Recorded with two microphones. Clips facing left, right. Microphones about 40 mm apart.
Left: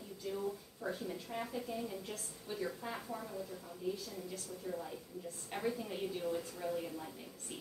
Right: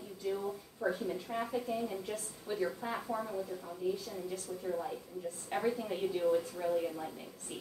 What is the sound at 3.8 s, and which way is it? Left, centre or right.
A woman's voice, centre.